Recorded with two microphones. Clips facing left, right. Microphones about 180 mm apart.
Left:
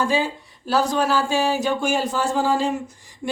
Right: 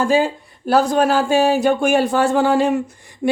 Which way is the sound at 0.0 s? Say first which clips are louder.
Right 5 dB; 50° right (ahead or behind).